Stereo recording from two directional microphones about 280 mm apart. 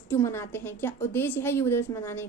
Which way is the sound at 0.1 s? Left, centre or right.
Centre.